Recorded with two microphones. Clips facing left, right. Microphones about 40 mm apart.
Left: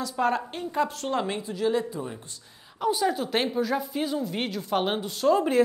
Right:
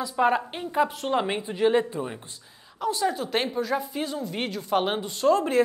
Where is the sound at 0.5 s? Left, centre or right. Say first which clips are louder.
Right 2 dB; centre.